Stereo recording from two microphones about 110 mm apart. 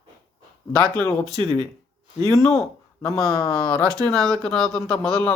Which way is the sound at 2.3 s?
Centre (ahead or behind).